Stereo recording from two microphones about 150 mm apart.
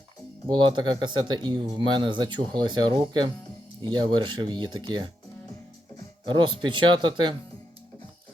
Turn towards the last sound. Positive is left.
turn(degrees=-30)  # may be behind; listen again after turning